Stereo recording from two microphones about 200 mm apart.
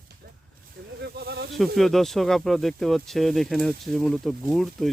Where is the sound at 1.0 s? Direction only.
55° right (ahead or behind).